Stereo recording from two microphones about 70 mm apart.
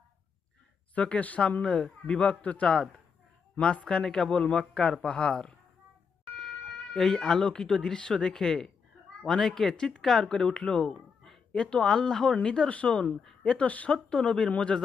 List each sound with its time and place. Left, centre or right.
0.9 s speech: centre
6.9 s speech: centre